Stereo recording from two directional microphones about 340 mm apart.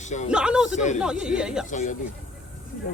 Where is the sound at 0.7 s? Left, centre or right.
Left.